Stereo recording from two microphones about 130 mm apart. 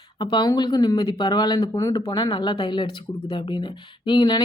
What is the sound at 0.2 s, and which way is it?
Speech, 35° left (ahead or behind).